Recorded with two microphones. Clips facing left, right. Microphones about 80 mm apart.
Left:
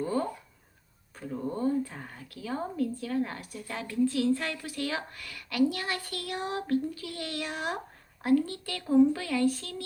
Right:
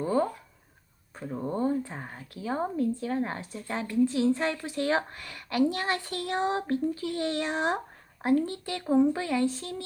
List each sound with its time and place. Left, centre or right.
0.0 s speech: right